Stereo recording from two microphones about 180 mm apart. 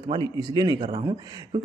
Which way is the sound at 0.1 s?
25° right (ahead or behind).